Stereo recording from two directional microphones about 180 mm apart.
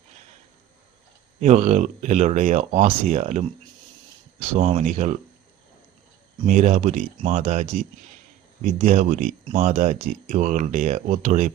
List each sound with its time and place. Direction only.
1.4 s speech: 40° right (ahead or behind)
6.4 s speech: 45° right (ahead or behind)